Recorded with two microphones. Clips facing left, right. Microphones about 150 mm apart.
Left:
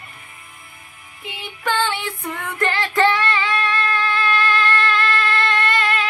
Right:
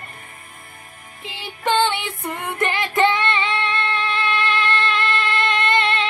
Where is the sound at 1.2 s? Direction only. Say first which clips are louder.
Right 1 dB; 25° right (ahead or behind).